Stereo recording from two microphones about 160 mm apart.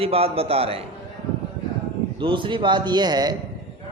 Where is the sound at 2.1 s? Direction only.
30° right (ahead or behind).